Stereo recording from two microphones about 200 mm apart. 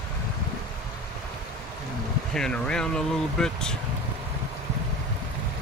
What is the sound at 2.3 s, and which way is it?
Speech, 5° left (ahead or behind).